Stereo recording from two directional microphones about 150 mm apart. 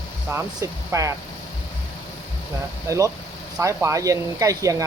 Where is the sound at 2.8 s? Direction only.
20° right (ahead or behind).